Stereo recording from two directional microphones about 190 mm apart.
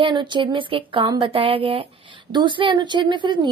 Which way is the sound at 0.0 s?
25° right (ahead or behind).